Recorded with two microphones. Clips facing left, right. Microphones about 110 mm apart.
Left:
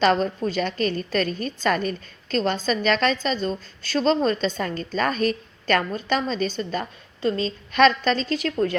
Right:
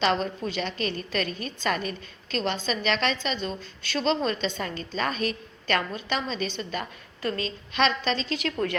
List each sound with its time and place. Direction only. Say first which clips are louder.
0.0 s a woman's voice: left 5 dB; 40° left (ahead or behind)
7.2 s a woman's voice: left 6 dB; 25° left (ahead or behind)
7.7 s a woman's voice: left 7 dB; 50° left (ahead or behind)